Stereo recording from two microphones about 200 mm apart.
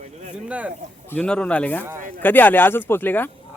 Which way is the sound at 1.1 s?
5° left (ahead or behind).